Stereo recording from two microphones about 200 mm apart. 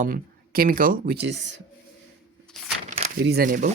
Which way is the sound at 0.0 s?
45° right (ahead or behind).